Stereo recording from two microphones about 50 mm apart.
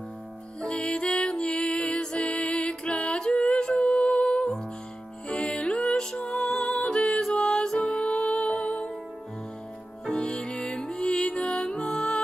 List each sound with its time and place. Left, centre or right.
0.6 s music: centre
10.1 s music: centre